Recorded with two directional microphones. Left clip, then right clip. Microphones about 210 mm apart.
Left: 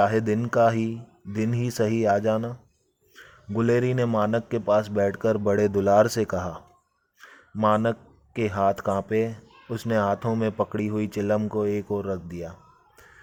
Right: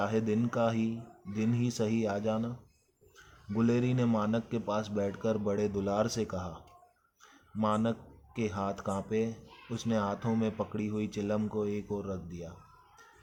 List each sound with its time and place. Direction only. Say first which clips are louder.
0.0 s speech: left 9 dB; 45° left (ahead or behind)
7.2 s a sound: left 9 dB; 40° left (ahead or behind)
8.4 s speech: left 11 dB; 45° left (ahead or behind)